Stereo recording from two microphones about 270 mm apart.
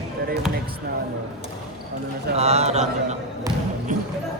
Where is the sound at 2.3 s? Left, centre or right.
Right.